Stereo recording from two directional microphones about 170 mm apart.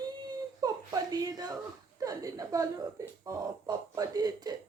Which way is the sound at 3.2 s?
20° right (ahead or behind).